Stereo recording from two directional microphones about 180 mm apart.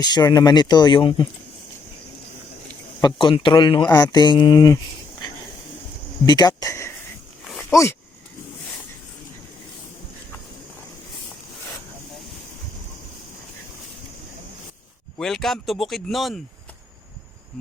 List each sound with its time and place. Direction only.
0.0 s speech: 25° left (ahead or behind)
3.0 s speech: 25° left (ahead or behind)
6.2 s speech: 20° left (ahead or behind)
15.2 s speech: centre (ahead or behind)